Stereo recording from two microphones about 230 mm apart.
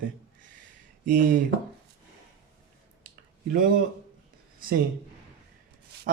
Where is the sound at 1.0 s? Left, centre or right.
Right.